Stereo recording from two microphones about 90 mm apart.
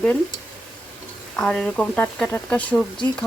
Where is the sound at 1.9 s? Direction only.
20° left (ahead or behind).